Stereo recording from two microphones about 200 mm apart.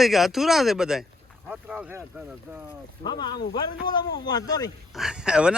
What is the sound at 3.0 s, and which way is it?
Speech, 20° left (ahead or behind).